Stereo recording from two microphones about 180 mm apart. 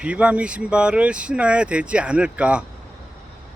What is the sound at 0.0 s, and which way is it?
Speech, 5° right (ahead or behind).